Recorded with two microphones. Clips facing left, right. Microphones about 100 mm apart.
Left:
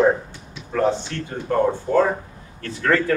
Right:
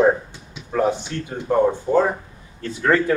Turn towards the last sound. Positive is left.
turn(degrees=-15)  # may be behind; listen again after turning